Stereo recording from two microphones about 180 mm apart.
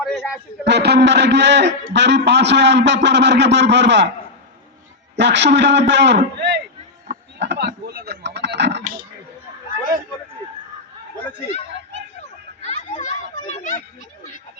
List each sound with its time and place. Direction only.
0.0 s a man's voice: centre (ahead or behind)
0.6 s a man's voice: 70° right (ahead or behind)
5.1 s a man's voice: 75° right (ahead or behind)
7.1 s a sound: 75° right (ahead or behind)
12.6 s children playing: 40° left (ahead or behind)